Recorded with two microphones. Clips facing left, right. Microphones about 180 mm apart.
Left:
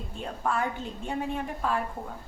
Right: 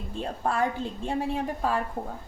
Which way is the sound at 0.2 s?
30° right (ahead or behind).